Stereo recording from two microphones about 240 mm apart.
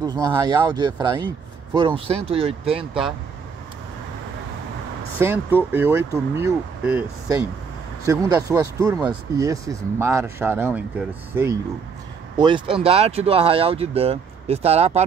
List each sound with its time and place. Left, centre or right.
0.0 s speech: centre
5.2 s speech: centre
12.4 s speech: centre